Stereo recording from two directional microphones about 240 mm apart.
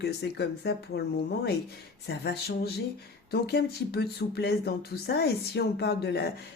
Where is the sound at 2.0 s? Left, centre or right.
Left.